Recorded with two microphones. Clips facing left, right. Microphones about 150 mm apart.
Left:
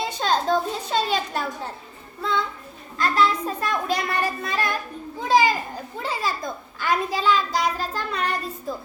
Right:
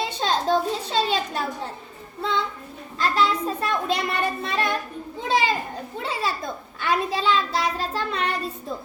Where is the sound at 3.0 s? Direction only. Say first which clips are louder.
Left 1 dB; 30° right (ahead or behind).